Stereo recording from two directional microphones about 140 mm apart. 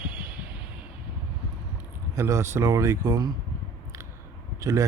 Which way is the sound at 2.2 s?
20° right (ahead or behind).